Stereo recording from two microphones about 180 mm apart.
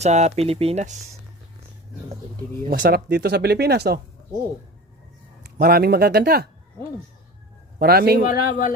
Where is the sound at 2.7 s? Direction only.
50° right (ahead or behind).